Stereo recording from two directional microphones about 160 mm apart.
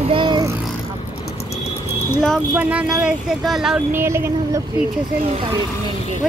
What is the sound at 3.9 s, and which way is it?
Speech, 15° right (ahead or behind).